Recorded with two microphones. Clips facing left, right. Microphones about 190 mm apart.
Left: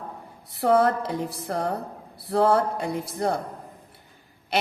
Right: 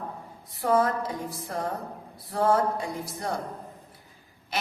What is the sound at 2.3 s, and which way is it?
A woman's voice, 70° left (ahead or behind).